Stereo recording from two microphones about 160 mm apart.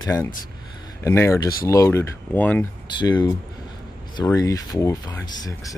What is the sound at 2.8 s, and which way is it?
Speech, 30° left (ahead or behind).